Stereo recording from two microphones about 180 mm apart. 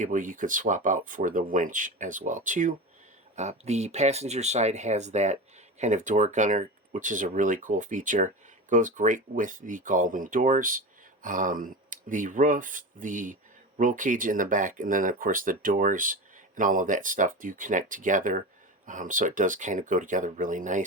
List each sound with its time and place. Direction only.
0.0 s speech: 45° right (ahead or behind)